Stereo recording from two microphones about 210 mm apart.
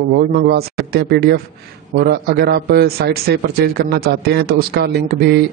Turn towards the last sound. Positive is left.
turn(degrees=-50)  # may be behind; listen again after turning